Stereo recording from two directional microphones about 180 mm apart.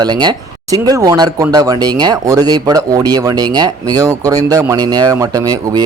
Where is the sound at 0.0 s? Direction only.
25° right (ahead or behind).